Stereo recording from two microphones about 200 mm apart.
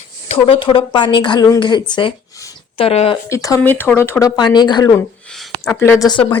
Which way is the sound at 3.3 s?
15° left (ahead or behind).